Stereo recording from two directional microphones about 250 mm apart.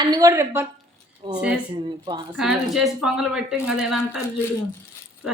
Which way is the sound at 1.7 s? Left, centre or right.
Centre.